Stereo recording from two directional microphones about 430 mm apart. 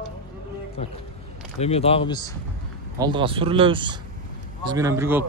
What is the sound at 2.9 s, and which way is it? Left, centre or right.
A man's voice, centre.